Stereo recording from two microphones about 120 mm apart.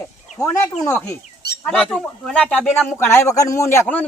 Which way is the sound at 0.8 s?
20° left (ahead or behind).